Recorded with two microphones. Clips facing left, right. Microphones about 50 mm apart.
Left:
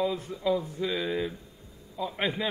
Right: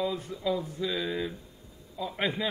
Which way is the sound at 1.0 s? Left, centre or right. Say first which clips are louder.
Left 2 dB; centre.